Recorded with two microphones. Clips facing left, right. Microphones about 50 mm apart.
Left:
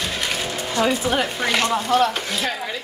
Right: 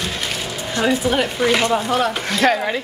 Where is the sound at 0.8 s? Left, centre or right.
Centre.